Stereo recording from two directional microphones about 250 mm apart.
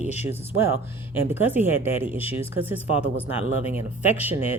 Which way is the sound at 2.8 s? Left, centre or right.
Left.